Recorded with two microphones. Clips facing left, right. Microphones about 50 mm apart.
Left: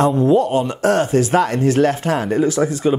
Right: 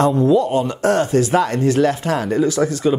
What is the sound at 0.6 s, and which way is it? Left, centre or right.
Speech, left.